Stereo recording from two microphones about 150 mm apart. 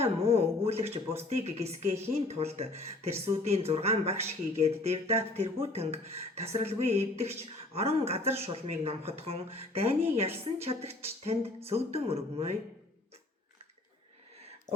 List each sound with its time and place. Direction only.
0.0 s speech: 45° right (ahead or behind)